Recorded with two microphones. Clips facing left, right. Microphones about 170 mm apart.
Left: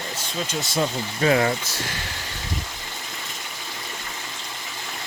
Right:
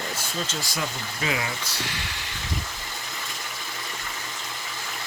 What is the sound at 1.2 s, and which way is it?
Speech, 45° left (ahead or behind).